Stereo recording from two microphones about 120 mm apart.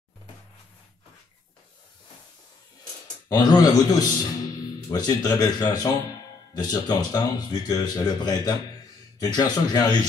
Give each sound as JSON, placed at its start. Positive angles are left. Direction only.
{"t": 3.3, "sound": "speech", "side_deg": 30}